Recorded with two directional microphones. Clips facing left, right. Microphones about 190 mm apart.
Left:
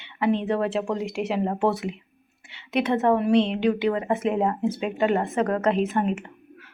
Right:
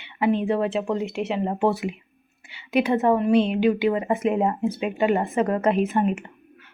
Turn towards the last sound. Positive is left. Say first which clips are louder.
# left 1 dB
turn(degrees=-5)  # may be behind; listen again after turning